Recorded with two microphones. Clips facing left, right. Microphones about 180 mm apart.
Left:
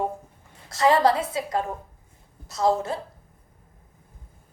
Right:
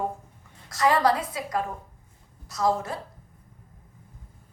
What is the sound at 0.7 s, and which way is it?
A woman's voice, 25° left (ahead or behind).